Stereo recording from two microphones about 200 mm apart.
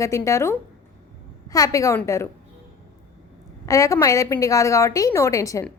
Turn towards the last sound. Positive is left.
turn(degrees=15)  # may be behind; listen again after turning